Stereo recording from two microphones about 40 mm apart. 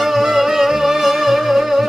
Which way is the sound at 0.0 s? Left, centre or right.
Centre.